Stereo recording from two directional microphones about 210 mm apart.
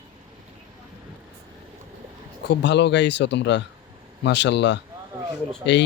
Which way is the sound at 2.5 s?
55° left (ahead or behind).